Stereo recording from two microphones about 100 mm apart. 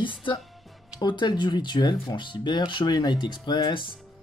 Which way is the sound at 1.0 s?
50° left (ahead or behind).